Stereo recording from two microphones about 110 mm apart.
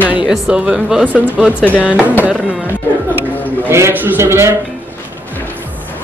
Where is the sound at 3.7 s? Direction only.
25° right (ahead or behind).